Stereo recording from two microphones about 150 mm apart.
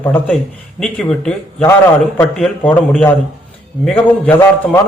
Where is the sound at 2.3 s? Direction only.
5° left (ahead or behind).